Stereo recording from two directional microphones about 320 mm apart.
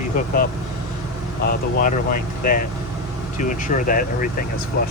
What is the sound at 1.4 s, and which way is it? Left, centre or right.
Speech, left.